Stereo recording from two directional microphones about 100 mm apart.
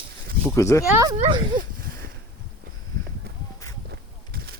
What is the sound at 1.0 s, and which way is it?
Speech, 45° right (ahead or behind).